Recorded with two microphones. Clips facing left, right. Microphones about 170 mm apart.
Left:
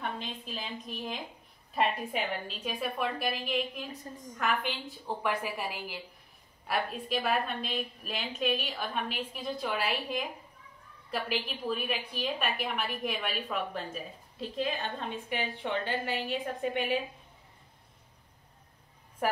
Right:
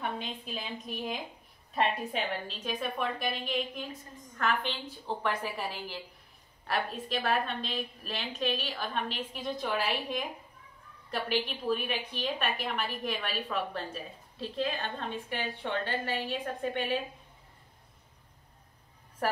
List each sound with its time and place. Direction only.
0.0 s a woman's voice: 5° right (ahead or behind); by 17.0 s 10° left (ahead or behind)